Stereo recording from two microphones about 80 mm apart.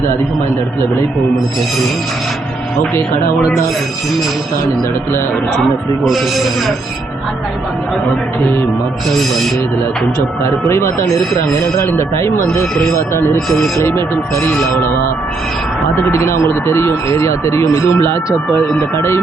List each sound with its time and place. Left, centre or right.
6.1 s speech: centre
10.7 s speech: left
13.7 s speech: left
16.1 s speech: left